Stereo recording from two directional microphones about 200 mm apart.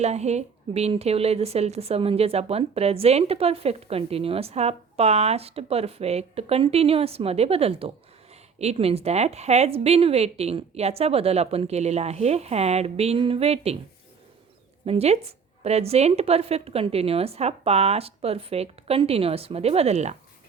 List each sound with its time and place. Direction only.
0.0 s a woman's voice: 35° right (ahead or behind)
14.8 s a woman's voice: 30° right (ahead or behind)